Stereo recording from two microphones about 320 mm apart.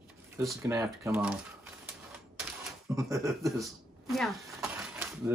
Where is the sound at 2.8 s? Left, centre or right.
Centre.